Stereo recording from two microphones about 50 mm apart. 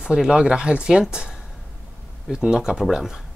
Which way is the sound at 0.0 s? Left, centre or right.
Centre.